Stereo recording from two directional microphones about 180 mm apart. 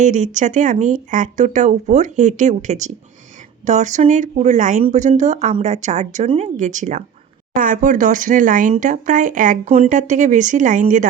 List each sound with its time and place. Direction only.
0.0 s speech: 45° right (ahead or behind)